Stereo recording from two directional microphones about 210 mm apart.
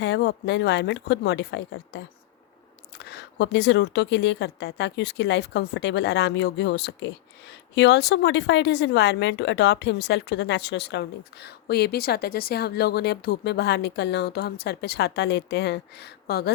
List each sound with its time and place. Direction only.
0.0 s speech: 55° left (ahead or behind)
3.0 s speech: 55° left (ahead or behind)